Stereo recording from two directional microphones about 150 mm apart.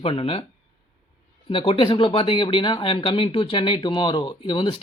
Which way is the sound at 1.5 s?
35° left (ahead or behind).